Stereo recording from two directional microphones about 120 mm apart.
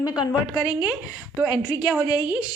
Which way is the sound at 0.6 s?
10° right (ahead or behind).